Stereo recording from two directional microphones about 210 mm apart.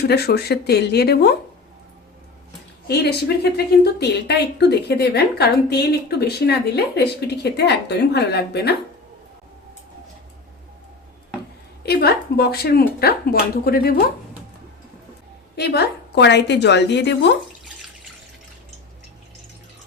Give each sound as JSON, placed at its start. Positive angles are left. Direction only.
{"t": 0.0, "sound": "a woman's voice", "side_deg": 50}
{"t": 2.8, "sound": "a woman's voice", "side_deg": 50}
{"t": 11.8, "sound": "a woman's voice", "side_deg": 50}
{"t": 15.5, "sound": "a woman's voice", "side_deg": 50}